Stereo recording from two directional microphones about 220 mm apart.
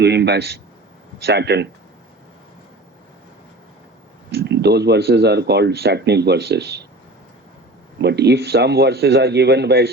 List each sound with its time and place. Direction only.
0.0 s speech: 50° right (ahead or behind)
4.3 s speech: 50° right (ahead or behind)
7.9 s speech: 50° right (ahead or behind)